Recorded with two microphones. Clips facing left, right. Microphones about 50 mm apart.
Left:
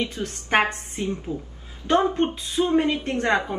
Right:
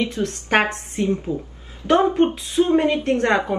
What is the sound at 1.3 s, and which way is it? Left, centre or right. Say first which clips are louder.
Speech: right 5 dB; right.